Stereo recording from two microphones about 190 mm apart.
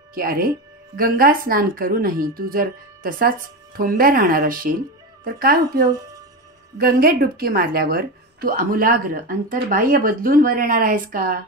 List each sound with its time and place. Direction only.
0.1 s a woman's voice: 50° right (ahead or behind)